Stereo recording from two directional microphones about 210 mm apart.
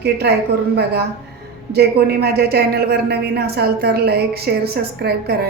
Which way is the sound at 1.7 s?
50° right (ahead or behind).